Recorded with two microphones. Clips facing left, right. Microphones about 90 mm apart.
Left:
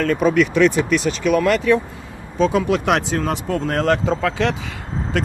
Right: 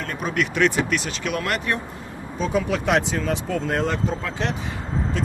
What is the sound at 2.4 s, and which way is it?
Speech, 90° left.